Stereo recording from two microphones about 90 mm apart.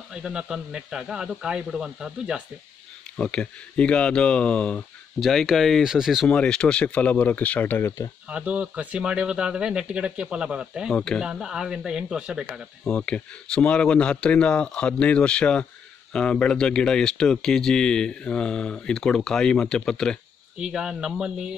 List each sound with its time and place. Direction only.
0.1 s speech: 10° right (ahead or behind)
3.2 s speech: 10° left (ahead or behind)
5.2 s speech: centre (ahead or behind)
6.2 s speech: 10° left (ahead or behind)
8.3 s speech: 15° right (ahead or behind)
11.0 s speech: 10° left (ahead or behind)
11.2 s speech: 5° right (ahead or behind)
12.8 s speech: 10° left (ahead or behind)
20.5 s speech: 10° right (ahead or behind)